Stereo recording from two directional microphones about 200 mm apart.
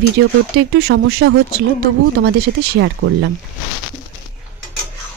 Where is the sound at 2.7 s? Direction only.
70° right (ahead or behind).